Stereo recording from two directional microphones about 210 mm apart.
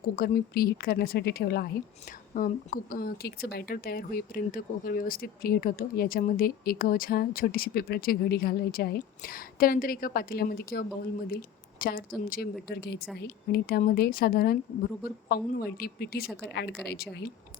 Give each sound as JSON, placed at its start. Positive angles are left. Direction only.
{"t": 0.0, "sound": "a woman's voice", "side_deg": 45}